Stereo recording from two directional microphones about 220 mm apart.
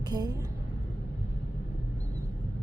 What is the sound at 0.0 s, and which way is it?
Speech, 15° right (ahead or behind).